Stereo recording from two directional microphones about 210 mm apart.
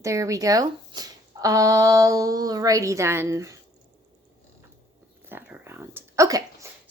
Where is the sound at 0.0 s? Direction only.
15° right (ahead or behind).